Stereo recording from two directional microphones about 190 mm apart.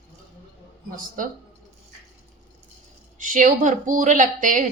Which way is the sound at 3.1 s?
45° right (ahead or behind).